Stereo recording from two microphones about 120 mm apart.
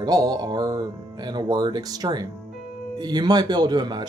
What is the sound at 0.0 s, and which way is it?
Speech, 30° right (ahead or behind).